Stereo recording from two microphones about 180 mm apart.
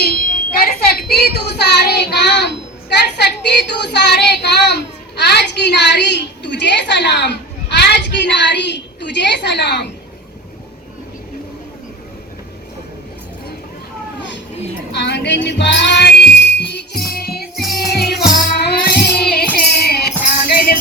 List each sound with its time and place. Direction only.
0.0 s speech: 55° left (ahead or behind)
14.9 s music: 70° left (ahead or behind)
17.1 s music: 60° left (ahead or behind)